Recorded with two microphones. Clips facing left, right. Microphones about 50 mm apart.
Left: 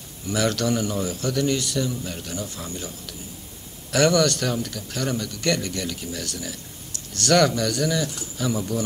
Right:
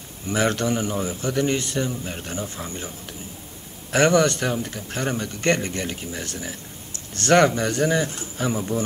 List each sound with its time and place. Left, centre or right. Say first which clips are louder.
0.3 s a man's voice: right 1 dB; right